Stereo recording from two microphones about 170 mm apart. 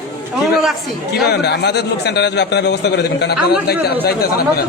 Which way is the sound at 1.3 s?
80° left.